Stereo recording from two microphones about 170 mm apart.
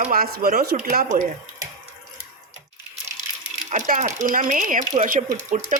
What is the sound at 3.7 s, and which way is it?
Speech, 45° right (ahead or behind).